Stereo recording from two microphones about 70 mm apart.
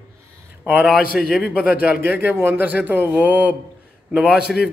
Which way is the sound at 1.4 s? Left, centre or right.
Centre.